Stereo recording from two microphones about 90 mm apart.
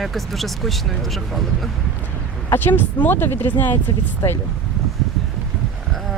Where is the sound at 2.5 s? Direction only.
20° left (ahead or behind).